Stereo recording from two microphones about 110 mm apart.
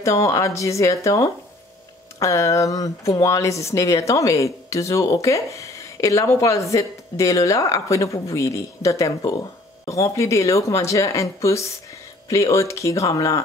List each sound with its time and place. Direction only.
0.0 s speech: 30° left (ahead or behind)